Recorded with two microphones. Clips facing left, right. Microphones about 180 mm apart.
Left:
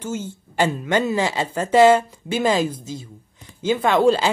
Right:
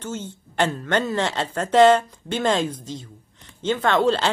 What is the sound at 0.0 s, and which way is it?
Speech, 10° left (ahead or behind).